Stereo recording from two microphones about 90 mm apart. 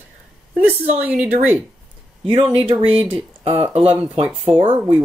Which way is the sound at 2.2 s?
90° right.